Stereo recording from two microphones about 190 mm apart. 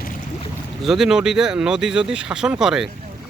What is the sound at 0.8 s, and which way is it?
Speech, centre (ahead or behind).